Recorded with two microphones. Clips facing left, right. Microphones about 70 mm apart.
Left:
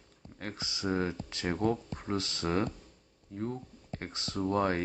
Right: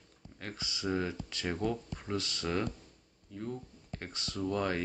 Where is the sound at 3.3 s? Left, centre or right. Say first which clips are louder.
Left 3 dB; left.